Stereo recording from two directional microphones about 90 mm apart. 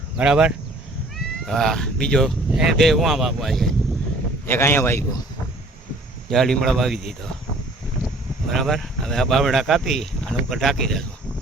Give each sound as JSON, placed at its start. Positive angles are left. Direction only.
{"t": 0.2, "sound": "speech", "side_deg": -10}
{"t": 1.1, "sound": "speech", "side_deg": 5}
{"t": 2.5, "sound": "speech", "side_deg": -5}
{"t": 4.4, "sound": "speech", "side_deg": 25}
{"t": 6.2, "sound": "speech", "side_deg": 5}
{"t": 8.4, "sound": "speech", "side_deg": 0}